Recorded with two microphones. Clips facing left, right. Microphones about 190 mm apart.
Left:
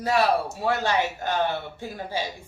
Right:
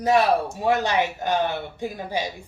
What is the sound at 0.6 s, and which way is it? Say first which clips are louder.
A man's voice: right 3 dB; 15° right (ahead or behind).